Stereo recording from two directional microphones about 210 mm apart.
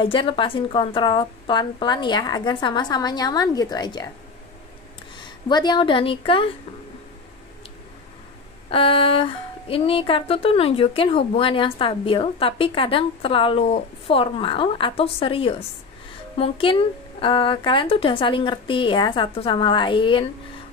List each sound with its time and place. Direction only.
0.0 s speech: 25° left (ahead or behind)
5.1 s speech: 20° left (ahead or behind)
8.6 s speech: 25° left (ahead or behind)